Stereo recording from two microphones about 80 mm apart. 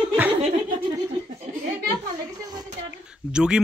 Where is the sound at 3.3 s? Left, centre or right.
Centre.